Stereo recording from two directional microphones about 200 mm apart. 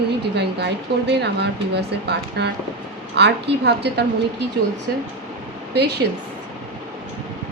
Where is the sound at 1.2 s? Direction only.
55° right (ahead or behind).